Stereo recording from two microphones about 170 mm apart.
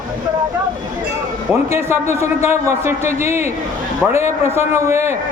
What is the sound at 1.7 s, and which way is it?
A man's voice, 15° right (ahead or behind).